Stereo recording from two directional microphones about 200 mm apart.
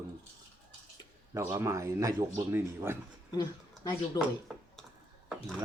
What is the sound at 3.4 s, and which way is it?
Speech, 20° left (ahead or behind).